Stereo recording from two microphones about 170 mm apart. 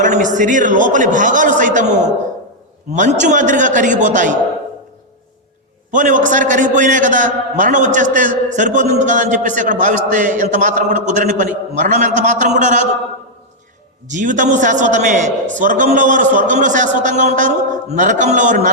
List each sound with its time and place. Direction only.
0.0 s a man's voice: 45° right (ahead or behind)
5.9 s a man's voice: 50° right (ahead or behind)
14.1 s a man's voice: 50° right (ahead or behind)